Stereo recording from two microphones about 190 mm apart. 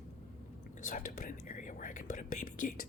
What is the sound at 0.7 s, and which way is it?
Whispering, 45° left (ahead or behind).